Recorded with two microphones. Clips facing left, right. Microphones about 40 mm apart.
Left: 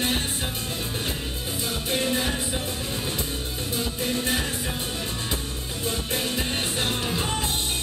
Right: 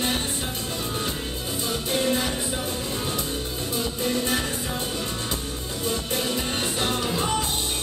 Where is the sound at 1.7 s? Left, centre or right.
Centre.